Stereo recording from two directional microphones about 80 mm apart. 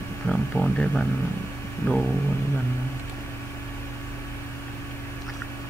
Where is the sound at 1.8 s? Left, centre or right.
Left.